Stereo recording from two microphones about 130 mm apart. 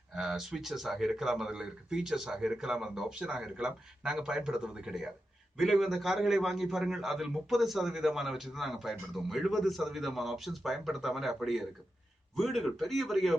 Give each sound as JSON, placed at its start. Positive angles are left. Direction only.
{"t": 0.1, "sound": "a man's voice", "side_deg": -5}